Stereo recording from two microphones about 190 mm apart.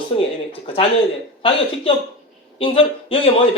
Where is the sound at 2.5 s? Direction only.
30° left (ahead or behind).